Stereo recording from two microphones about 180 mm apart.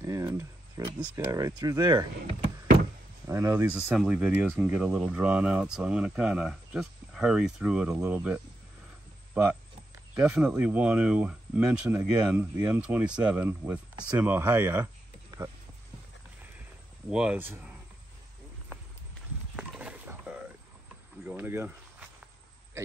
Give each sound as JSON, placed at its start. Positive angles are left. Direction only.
{"t": 0.0, "sound": "a sound", "side_deg": -20}
{"t": 1.1, "sound": "speech", "side_deg": -20}
{"t": 3.3, "sound": "speech", "side_deg": -15}
{"t": 17.1, "sound": "speech", "side_deg": -5}
{"t": 19.5, "sound": "a sound", "side_deg": -5}
{"t": 21.3, "sound": "speech", "side_deg": -10}